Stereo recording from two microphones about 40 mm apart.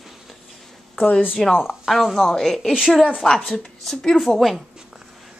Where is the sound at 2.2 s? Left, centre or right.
Centre.